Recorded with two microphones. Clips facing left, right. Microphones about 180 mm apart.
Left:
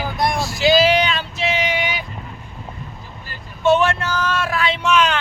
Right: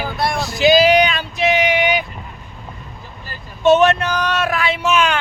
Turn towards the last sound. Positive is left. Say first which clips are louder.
# right 1 dB
turn(degrees=-10)  # may be behind; listen again after turning